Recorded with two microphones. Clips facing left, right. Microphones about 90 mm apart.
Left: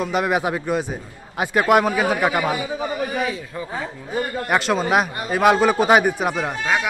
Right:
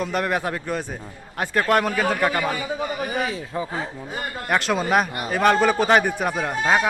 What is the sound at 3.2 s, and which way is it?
Speech, 30° right (ahead or behind).